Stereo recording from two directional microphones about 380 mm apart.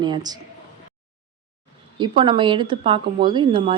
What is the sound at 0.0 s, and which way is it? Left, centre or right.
Speech, centre.